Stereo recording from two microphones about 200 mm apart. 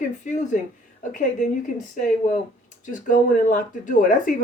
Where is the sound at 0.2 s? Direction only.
40° left (ahead or behind).